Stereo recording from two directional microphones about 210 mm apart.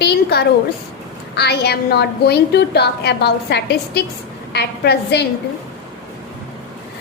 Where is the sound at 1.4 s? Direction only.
50° left (ahead or behind).